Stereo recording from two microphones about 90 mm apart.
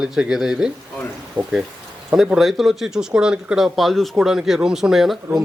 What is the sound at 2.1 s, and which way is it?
Speech, 10° right (ahead or behind).